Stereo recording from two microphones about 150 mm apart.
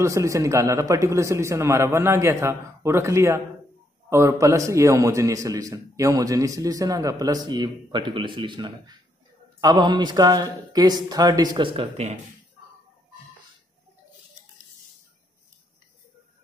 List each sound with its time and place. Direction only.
0.0 s a man's voice: 20° right (ahead or behind); by 12.1 s 40° right (ahead or behind)